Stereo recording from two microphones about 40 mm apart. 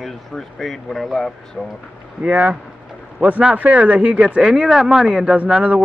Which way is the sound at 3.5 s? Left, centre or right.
Right.